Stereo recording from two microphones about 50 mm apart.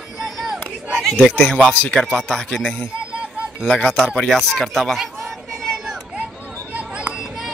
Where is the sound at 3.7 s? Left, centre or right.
Centre.